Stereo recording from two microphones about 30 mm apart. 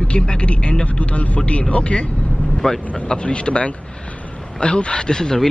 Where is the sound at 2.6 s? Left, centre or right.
Centre.